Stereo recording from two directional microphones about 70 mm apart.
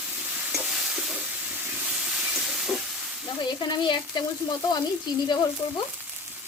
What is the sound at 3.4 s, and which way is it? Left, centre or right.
Speech, left.